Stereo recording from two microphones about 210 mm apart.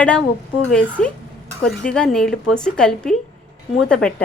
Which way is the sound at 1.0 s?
5° left (ahead or behind).